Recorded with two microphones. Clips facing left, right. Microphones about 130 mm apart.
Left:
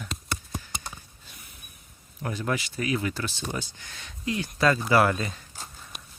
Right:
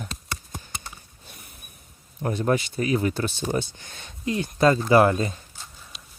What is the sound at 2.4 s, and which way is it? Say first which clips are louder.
Speech: right 6 dB; 25° right (ahead or behind).